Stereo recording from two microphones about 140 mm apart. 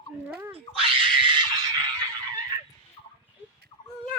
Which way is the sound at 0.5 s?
40° right (ahead or behind).